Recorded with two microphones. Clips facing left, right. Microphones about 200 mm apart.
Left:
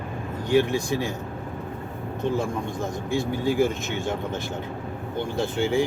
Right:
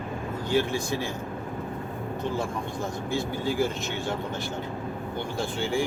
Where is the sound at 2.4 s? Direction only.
20° left (ahead or behind).